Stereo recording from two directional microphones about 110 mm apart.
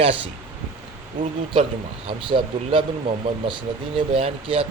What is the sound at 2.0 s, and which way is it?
Speech, 55° right (ahead or behind).